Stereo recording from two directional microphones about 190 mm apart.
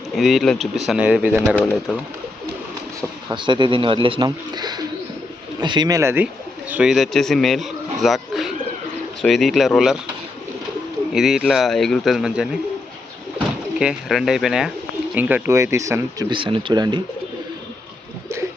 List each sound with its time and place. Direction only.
0.2 s speech: centre (ahead or behind)
1.5 s speech: 10° left (ahead or behind)
3.2 s speech: 25° right (ahead or behind); by 10.0 s centre (ahead or behind)
11.1 s speech: centre (ahead or behind)
13.7 s speech: centre (ahead or behind); by 17.0 s 25° right (ahead or behind)